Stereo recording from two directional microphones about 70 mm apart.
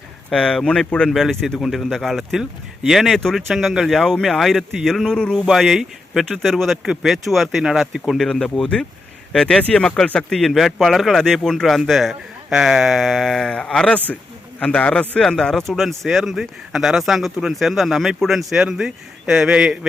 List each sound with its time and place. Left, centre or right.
0.3 s speech: centre
1.1 s speech: centre
6.8 s speech: centre
8.3 s a man's voice: centre